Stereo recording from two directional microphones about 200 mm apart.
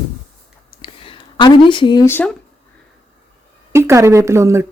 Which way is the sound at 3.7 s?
15° right (ahead or behind).